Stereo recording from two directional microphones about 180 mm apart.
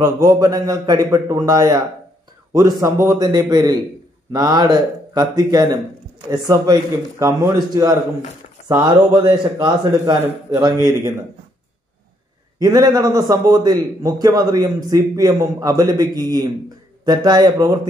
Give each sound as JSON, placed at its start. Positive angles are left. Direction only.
{"t": 0.0, "sound": "a man's voice", "side_deg": -20}
{"t": 12.5, "sound": "a man's voice", "side_deg": -20}